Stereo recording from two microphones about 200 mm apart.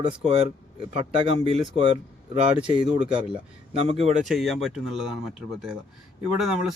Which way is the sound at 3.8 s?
30° right (ahead or behind).